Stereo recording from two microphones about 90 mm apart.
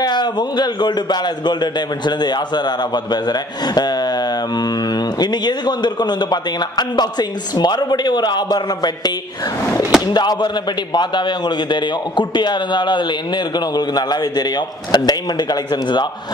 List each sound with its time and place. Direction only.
0.0 s speech: 55° left (ahead or behind)